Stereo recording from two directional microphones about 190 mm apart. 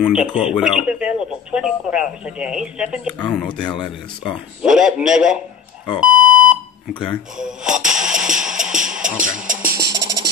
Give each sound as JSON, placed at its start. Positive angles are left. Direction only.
{"t": 0.0, "sound": "speech", "side_deg": -5}
{"t": 5.9, "sound": "alarm clock", "side_deg": -5}
{"t": 6.9, "sound": "music", "side_deg": -5}
{"t": 9.2, "sound": "music", "side_deg": -45}
{"t": 9.8, "sound": "music", "side_deg": -20}